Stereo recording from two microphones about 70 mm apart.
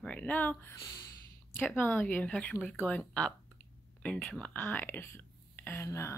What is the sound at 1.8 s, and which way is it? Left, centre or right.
Speech, left.